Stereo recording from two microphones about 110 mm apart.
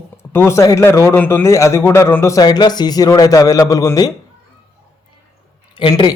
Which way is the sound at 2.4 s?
40° left (ahead or behind).